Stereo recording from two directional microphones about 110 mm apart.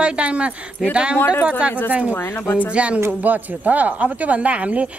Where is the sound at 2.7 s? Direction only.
10° right (ahead or behind).